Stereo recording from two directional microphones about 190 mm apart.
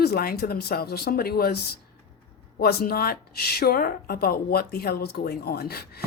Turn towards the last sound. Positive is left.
turn(degrees=55)  # may be behind; listen again after turning